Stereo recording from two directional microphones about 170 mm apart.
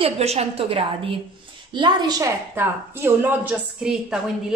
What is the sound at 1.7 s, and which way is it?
Speech, 25° right (ahead or behind).